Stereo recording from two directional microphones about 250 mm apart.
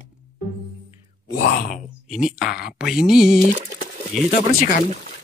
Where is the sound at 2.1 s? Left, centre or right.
Centre.